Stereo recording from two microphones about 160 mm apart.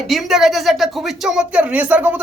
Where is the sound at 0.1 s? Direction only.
Centre (ahead or behind).